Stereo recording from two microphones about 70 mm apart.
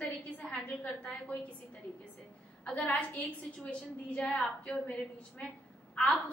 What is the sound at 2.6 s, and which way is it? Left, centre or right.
A woman's voice, centre.